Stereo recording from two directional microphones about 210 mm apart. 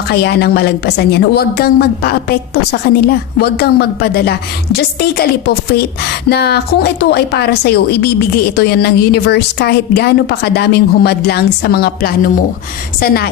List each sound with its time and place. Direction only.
0.1 s a woman's voice: 50° left (ahead or behind)